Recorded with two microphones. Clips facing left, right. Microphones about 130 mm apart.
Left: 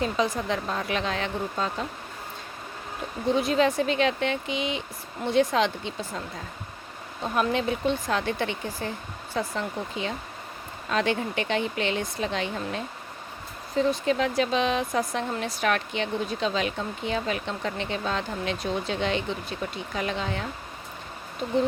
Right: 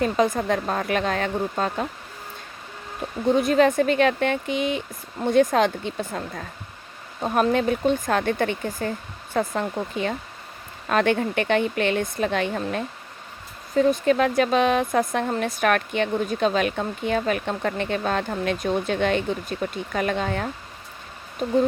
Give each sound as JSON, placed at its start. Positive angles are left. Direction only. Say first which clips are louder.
{"t": 0.0, "sound": "speech", "louder": "right 5 dB", "side_deg": -50}
{"t": 3.3, "sound": "speech", "louder": "right 5 dB", "side_deg": -50}
{"t": 7.3, "sound": "speech", "louder": "right 5 dB", "side_deg": -45}